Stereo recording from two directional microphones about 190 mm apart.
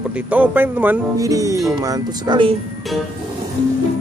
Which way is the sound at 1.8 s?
20° right (ahead or behind).